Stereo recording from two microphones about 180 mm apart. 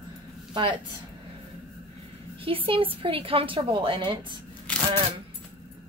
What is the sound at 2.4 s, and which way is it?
A woman's voice, 30° right (ahead or behind).